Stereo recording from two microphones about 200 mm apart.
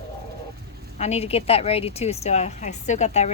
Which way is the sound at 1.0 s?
30° left (ahead or behind).